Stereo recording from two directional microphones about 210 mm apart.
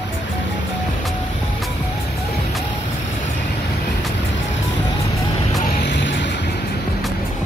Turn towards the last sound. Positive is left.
turn(degrees=60)  # may be behind; listen again after turning